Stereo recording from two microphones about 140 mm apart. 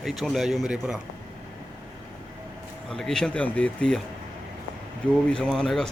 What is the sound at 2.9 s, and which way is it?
Speech, 5° left (ahead or behind).